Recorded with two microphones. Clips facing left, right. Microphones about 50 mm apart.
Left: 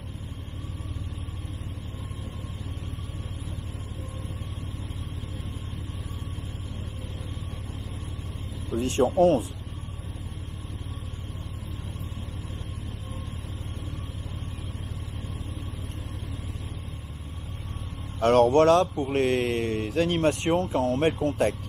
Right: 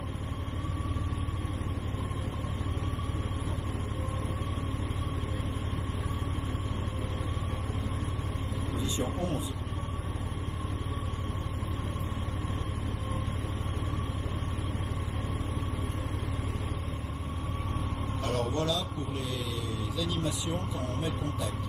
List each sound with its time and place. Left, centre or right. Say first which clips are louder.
8.7 s vehicle: left 10 dB; left
18.2 s speech: left 14 dB; left